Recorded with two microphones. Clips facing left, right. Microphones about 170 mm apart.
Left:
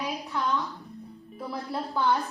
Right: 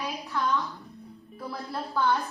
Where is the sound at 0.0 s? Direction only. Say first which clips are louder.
Even; 20° left (ahead or behind).